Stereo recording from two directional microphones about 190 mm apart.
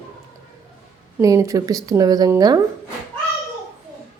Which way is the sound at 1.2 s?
15° right (ahead or behind).